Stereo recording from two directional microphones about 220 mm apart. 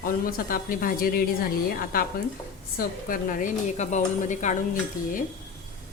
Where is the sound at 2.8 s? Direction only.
40° left (ahead or behind).